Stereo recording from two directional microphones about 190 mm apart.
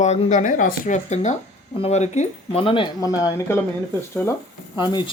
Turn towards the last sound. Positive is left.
turn(degrees=25)  # may be behind; listen again after turning